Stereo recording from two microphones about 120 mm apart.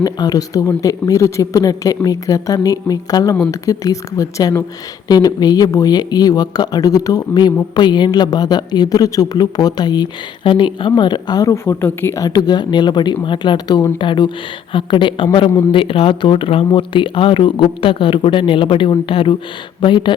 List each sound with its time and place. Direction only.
0.0 s a woman's voice: 30° left (ahead or behind)